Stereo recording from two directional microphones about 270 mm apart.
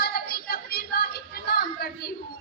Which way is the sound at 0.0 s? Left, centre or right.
Left.